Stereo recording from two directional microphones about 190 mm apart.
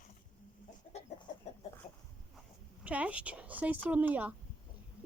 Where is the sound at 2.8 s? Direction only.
5° right (ahead or behind).